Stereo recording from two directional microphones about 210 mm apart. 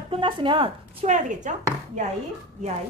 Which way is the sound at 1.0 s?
35° right (ahead or behind).